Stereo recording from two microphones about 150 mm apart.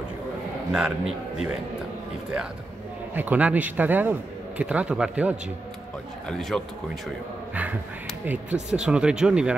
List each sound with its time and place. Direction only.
0.7 s speech: 5° right (ahead or behind)
3.2 s a man's voice: 10° right (ahead or behind)
6.2 s speech: 5° left (ahead or behind)
8.3 s a man's voice: 10° right (ahead or behind)